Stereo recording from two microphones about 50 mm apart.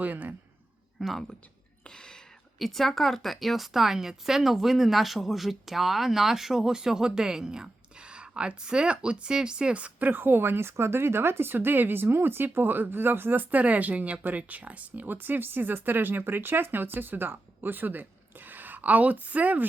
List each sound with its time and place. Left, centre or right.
0.0 s speech: right
0.9 s speech: centre
1.9 s whispering: centre
2.6 s speech: centre; by 10.1 s right
10.1 s speech: right